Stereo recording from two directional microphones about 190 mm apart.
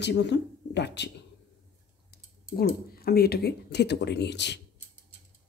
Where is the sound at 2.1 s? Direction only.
55° left (ahead or behind).